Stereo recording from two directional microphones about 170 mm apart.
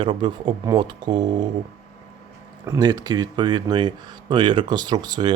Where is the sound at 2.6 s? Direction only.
20° right (ahead or behind).